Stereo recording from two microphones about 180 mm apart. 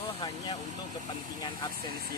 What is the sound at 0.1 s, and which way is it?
Vehicle, 20° left (ahead or behind).